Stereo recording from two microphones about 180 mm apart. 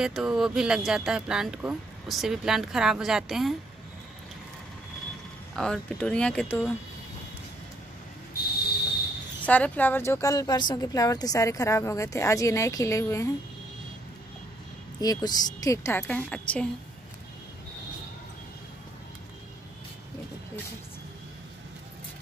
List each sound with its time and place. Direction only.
0.0 s speech: centre (ahead or behind)
5.6 s speech: 5° left (ahead or behind)
9.5 s a woman's voice: 10° left (ahead or behind)
15.0 s a woman's voice: 20° left (ahead or behind)